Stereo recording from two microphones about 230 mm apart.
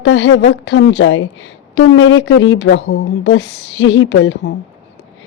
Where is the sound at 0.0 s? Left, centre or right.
Left.